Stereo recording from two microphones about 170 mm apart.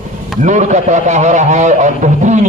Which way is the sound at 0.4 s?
45° right (ahead or behind).